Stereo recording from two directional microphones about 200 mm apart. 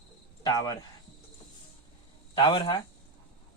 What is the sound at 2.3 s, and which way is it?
Speech, 20° left (ahead or behind).